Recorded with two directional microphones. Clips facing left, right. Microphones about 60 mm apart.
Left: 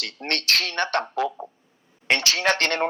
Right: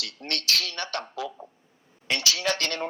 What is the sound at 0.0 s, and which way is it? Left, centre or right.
Speech, left.